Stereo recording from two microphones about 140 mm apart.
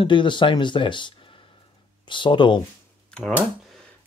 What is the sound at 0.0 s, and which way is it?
Speech, 35° left (ahead or behind).